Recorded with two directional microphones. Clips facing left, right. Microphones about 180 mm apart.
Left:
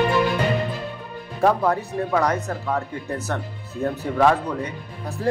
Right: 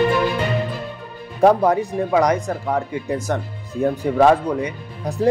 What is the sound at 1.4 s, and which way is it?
A man's voice, 15° right (ahead or behind).